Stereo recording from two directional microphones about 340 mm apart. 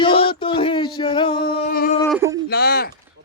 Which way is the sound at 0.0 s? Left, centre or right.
Centre.